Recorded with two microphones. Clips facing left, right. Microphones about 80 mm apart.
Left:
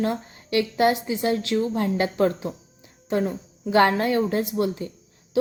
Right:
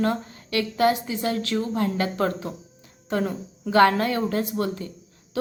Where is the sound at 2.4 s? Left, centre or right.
Left.